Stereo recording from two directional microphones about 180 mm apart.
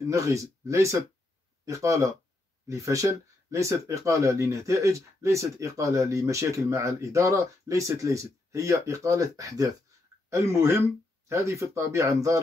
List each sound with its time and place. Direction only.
0.0 s speech: 15° right (ahead or behind)